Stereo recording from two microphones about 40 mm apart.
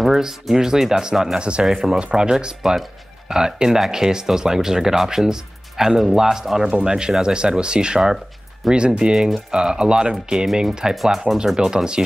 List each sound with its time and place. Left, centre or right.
0.0 s speech: centre
1.4 s speech: right
2.6 s speech: centre
11.0 s speech: centre
11.5 s speech: centre